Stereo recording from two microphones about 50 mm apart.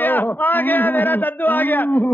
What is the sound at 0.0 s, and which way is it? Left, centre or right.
Speech, left.